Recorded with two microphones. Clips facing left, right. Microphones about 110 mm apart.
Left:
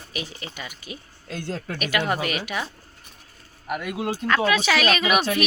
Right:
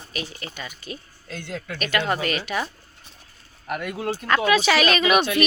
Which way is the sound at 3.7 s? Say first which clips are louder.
Even; 5° left (ahead or behind).